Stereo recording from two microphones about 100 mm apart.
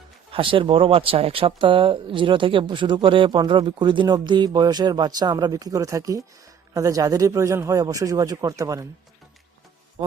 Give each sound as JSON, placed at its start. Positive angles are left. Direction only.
{"t": 0.3, "sound": "speech", "side_deg": -65}